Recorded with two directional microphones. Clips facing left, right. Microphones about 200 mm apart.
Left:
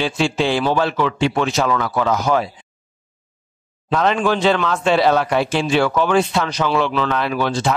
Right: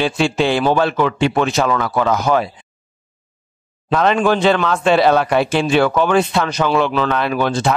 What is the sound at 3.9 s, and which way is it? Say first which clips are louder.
Speech: right 3 dB; 60° right (ahead or behind).